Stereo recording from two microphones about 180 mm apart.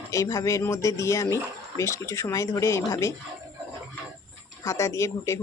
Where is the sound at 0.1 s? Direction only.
15° left (ahead or behind).